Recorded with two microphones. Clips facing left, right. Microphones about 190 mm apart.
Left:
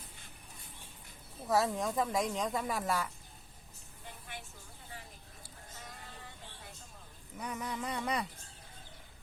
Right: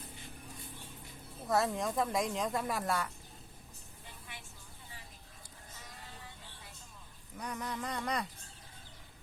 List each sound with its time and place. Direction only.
1.5 s speech: centre (ahead or behind)
7.3 s speech: 5° left (ahead or behind)